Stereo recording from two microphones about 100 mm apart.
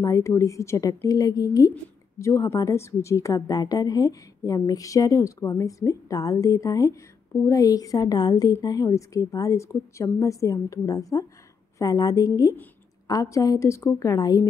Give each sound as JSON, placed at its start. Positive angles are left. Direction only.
{"t": 0.0, "sound": "a woman's voice", "side_deg": 30}